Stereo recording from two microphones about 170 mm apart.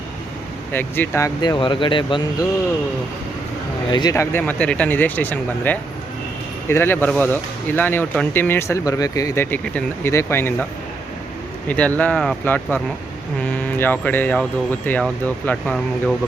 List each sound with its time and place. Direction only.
0.7 s speech: 10° left (ahead or behind)
1.4 s speech: 25° left (ahead or behind)
3.9 s speech: 20° left (ahead or behind)
11.7 s speech: 10° left (ahead or behind)